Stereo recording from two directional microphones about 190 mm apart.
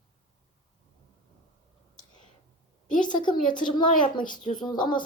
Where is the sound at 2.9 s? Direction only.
25° left (ahead or behind).